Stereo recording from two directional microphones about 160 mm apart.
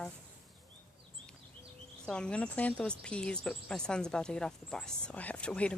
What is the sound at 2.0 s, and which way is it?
Speech, 5° left (ahead or behind).